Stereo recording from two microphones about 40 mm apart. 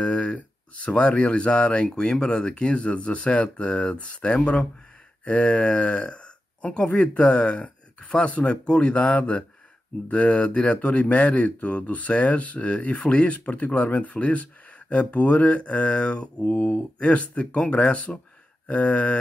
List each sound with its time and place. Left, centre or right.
0.0 s a sound: left
0.8 s speech: left
2.0 s speech: centre; by 16.5 s left
16.5 s speech: left
17.1 s speech: left